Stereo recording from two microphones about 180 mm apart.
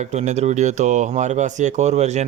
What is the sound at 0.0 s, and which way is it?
Speech, 40° right (ahead or behind).